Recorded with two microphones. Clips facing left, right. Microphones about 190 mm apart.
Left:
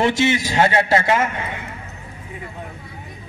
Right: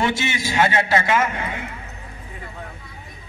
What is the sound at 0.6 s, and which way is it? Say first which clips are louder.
Speech: left 1 dB; 35° left (ahead or behind).